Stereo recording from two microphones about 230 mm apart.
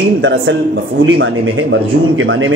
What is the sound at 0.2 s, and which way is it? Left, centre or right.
A man's voice, right.